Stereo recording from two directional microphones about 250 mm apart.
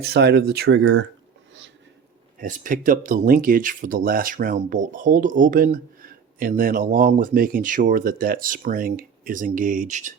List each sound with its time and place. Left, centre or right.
0.0 s speech: right
2.4 s speech: right